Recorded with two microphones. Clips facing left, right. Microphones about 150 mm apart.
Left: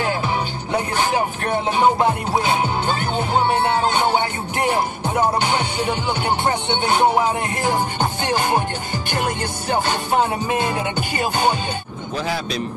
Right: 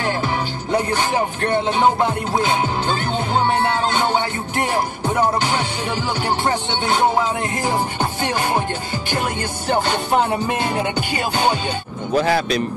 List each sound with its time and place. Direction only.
12.3 s speech: 65° right (ahead or behind)